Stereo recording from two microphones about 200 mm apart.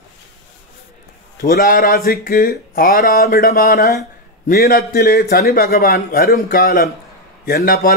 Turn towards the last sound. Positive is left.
turn(degrees=50)  # may be behind; listen again after turning